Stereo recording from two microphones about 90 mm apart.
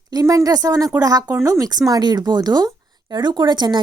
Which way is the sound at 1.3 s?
35° right (ahead or behind).